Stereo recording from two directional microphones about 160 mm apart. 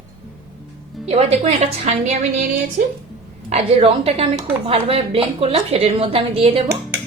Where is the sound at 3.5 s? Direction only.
40° right (ahead or behind).